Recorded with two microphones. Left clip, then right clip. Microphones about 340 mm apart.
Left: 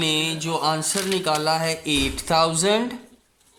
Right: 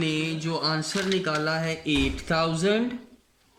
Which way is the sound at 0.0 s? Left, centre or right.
Centre.